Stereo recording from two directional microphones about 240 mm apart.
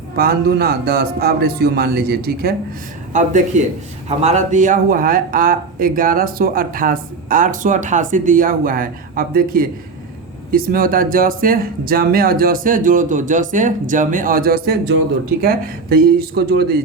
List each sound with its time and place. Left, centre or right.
0.2 s speech: right